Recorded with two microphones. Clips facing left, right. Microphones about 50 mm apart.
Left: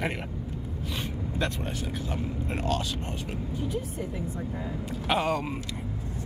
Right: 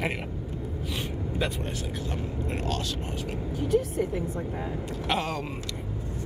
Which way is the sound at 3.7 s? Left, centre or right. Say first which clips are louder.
Right 12 dB; right.